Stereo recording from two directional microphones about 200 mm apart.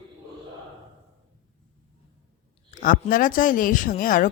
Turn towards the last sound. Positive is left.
turn(degrees=40)  # may be behind; listen again after turning